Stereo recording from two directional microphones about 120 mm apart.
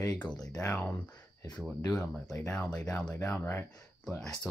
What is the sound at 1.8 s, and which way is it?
Speech, 30° left (ahead or behind).